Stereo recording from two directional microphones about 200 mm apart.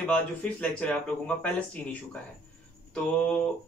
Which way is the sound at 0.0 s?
5° left (ahead or behind).